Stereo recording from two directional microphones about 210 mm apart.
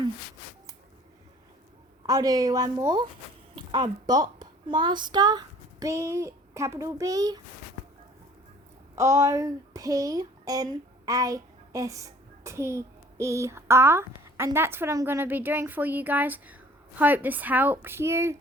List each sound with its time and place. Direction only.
2.0 s a woman's voice: 15° right (ahead or behind)
9.0 s a woman's voice: 15° right (ahead or behind)